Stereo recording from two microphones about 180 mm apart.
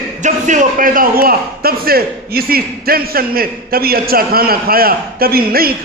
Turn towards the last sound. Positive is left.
turn(degrees=-55)  # may be behind; listen again after turning